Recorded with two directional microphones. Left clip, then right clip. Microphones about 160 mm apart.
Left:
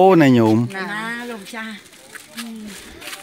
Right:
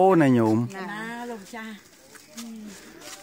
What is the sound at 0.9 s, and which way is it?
Speech, 20° right (ahead or behind).